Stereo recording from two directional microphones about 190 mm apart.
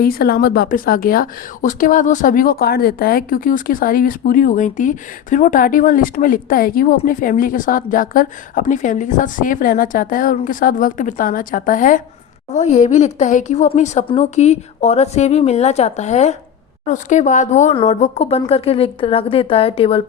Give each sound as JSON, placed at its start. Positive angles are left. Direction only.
{"t": 0.0, "sound": "a woman's voice", "side_deg": 55}